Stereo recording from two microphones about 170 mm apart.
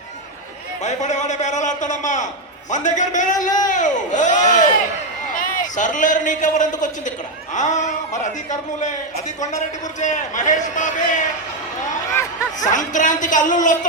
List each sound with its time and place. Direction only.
0.8 s a man's voice: 45° left (ahead or behind)
12.5 s a man's voice: 45° left (ahead or behind)